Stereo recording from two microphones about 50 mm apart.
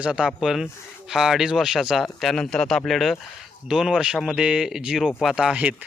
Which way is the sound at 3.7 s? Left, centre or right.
Centre.